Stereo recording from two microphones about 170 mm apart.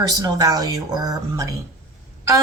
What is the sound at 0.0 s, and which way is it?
Speech, 25° right (ahead or behind).